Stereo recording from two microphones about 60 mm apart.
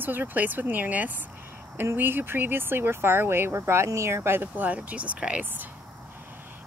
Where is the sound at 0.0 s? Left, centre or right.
Right.